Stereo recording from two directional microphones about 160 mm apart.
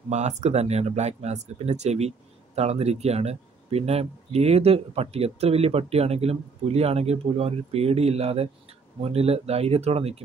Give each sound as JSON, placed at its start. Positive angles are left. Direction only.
{"t": 0.1, "sound": "speech", "side_deg": -45}